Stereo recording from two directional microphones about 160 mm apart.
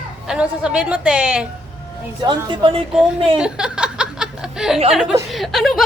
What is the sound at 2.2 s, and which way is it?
Speech, 30° right (ahead or behind).